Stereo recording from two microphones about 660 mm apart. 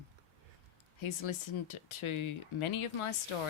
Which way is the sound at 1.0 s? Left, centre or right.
Left.